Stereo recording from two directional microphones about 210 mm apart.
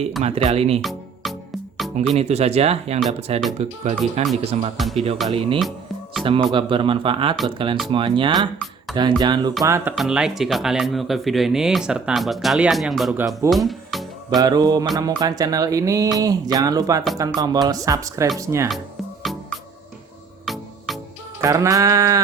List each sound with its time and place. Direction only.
0.2 s speech: 30° right (ahead or behind)
0.8 s music: centre (ahead or behind)
2.1 s speech: 30° right (ahead or behind)
4.8 s speech: centre (ahead or behind)
5.3 s speech: 25° right (ahead or behind)
9.9 s speech: centre (ahead or behind)
13.5 s music: centre (ahead or behind)
14.3 s speech: 20° right (ahead or behind)
19.2 s music: centre (ahead or behind)
21.4 s speech: 15° right (ahead or behind)